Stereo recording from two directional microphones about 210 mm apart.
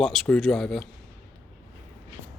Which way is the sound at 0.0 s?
Centre (ahead or behind).